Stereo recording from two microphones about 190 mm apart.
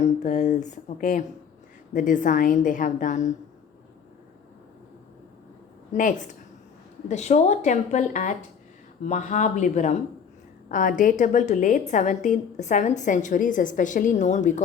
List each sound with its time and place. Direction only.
0.0 s a woman's voice: 40° left (ahead or behind)
5.9 s a woman's voice: 40° left (ahead or behind)